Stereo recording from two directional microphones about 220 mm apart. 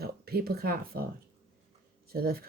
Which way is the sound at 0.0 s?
45° right (ahead or behind).